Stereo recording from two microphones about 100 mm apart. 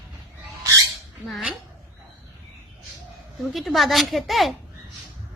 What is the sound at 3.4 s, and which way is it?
A woman's voice, centre (ahead or behind).